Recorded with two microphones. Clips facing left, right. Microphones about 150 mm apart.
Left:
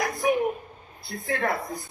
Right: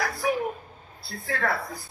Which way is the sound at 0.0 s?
20° left (ahead or behind).